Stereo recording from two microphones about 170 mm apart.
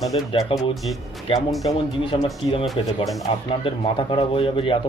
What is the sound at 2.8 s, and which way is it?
A man's voice, 30° left (ahead or behind).